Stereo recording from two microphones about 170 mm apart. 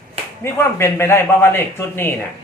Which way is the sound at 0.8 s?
15° left (ahead or behind).